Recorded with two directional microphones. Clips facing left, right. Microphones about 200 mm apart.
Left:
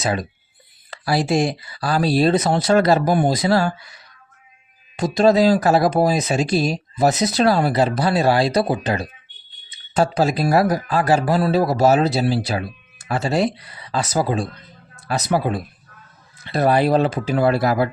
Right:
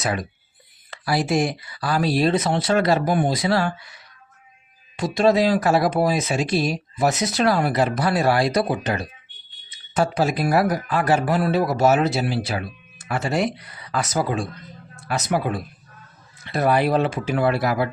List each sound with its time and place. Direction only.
0.0 s speech: 25° left (ahead or behind)
4.9 s speech: 40° left (ahead or behind)